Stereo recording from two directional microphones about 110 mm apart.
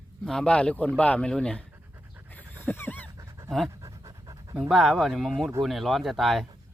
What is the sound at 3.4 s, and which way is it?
Pant, centre (ahead or behind).